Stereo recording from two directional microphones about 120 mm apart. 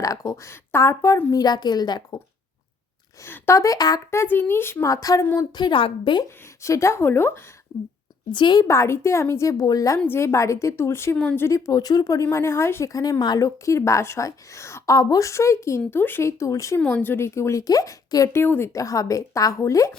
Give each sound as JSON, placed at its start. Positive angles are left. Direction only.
{"t": 0.0, "sound": "speech", "side_deg": 30}
{"t": 3.2, "sound": "speech", "side_deg": 20}
{"t": 5.5, "sound": "a woman's voice", "side_deg": 40}
{"t": 6.6, "sound": "speech", "side_deg": 25}
{"t": 8.3, "sound": "a woman's voice", "side_deg": 40}
{"t": 8.6, "sound": "speech", "side_deg": 25}
{"t": 16.8, "sound": "speech", "side_deg": 15}
{"t": 18.4, "sound": "speech", "side_deg": 20}